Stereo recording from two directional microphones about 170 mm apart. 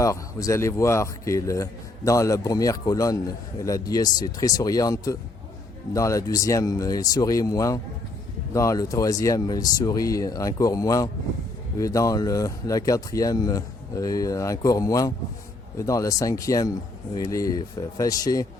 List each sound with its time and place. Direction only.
0.0 s speech: 20° left (ahead or behind)